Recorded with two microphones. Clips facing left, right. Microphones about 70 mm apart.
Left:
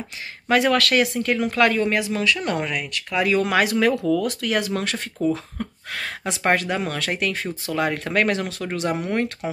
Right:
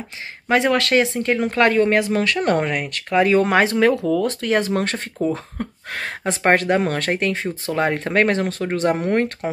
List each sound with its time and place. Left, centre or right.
0.5 s speech: right